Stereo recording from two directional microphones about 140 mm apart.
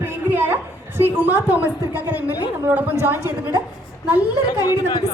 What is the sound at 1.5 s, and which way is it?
A woman's voice, 10° right (ahead or behind).